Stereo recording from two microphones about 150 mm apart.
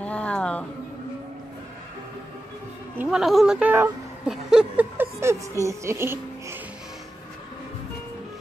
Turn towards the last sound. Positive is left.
turn(degrees=-15)  # may be behind; listen again after turning